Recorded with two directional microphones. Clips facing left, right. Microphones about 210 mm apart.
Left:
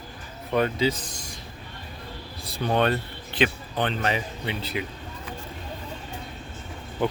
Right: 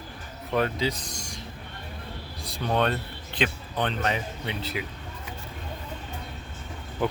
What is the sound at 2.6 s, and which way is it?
Speech, centre (ahead or behind).